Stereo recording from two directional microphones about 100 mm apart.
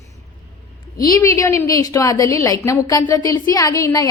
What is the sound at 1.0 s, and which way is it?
A woman's voice, 35° left (ahead or behind).